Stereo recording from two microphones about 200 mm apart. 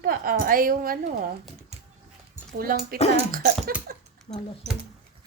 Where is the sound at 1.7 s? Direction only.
30° right (ahead or behind).